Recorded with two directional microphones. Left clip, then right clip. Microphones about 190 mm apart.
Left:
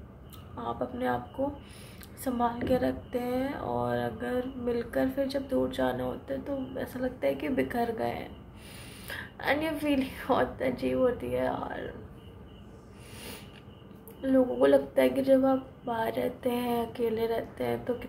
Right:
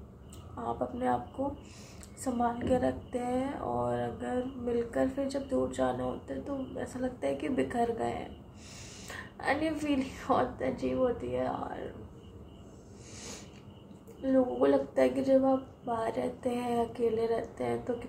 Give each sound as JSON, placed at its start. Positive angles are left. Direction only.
{"t": 0.7, "sound": "a woman's voice", "side_deg": 5}
{"t": 2.2, "sound": "a woman's voice", "side_deg": 0}
{"t": 14.2, "sound": "a woman's voice", "side_deg": 5}